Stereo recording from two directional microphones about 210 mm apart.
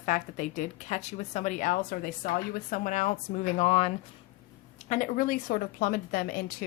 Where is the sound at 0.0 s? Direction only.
35° left (ahead or behind).